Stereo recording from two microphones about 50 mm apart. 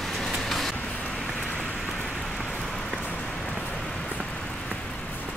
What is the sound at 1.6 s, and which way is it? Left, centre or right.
Rain on surface, centre.